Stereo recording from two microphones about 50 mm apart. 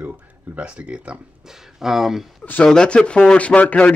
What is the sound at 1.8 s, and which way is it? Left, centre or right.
Speech, centre.